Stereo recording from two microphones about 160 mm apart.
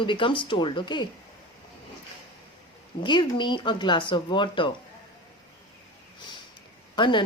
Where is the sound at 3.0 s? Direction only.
30° left (ahead or behind).